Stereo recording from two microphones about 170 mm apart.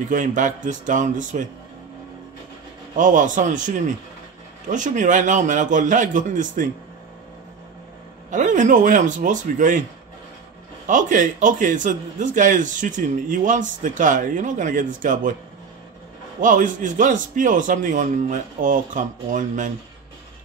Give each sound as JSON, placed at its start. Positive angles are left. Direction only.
{"t": 0.1, "sound": "a man's voice", "side_deg": -50}
{"t": 3.0, "sound": "a man's voice", "side_deg": -50}
{"t": 8.3, "sound": "a man's voice", "side_deg": -50}
{"t": 10.9, "sound": "a man's voice", "side_deg": -50}
{"t": 16.3, "sound": "a man's voice", "side_deg": -50}